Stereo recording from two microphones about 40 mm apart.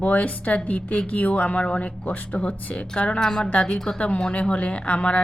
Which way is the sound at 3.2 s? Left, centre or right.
Centre.